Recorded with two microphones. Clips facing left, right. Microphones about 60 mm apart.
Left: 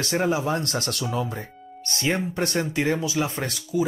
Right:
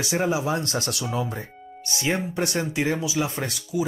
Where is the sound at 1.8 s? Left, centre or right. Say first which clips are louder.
Left 1 dB; centre.